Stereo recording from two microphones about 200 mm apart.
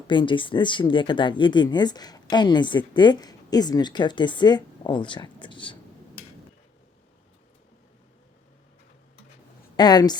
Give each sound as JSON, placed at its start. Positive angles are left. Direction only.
{"t": 0.1, "sound": "speech", "side_deg": 25}
{"t": 9.7, "sound": "speech", "side_deg": 20}